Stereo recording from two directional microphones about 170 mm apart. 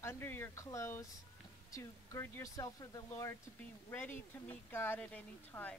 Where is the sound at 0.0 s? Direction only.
15° left (ahead or behind).